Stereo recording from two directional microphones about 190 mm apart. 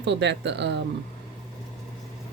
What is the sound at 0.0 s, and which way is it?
Speech, 65° right (ahead or behind).